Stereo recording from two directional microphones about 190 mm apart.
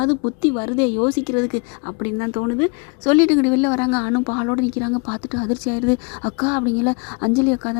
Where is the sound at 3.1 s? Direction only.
10° left (ahead or behind).